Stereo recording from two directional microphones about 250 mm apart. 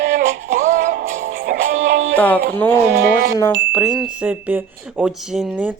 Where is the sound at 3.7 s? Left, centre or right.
Centre.